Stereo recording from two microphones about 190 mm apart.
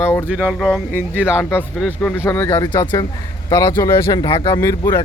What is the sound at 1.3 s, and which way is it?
Speech, 10° left (ahead or behind).